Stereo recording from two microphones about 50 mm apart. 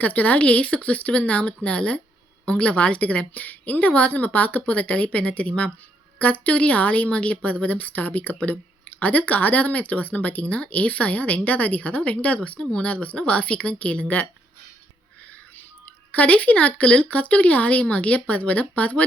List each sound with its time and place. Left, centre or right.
0.0 s a woman's voice: left
12.4 s a woman's voice: centre
16.1 s a woman's voice: left